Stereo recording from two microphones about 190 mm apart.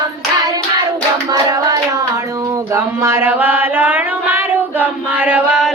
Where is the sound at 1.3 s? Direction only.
15° right (ahead or behind).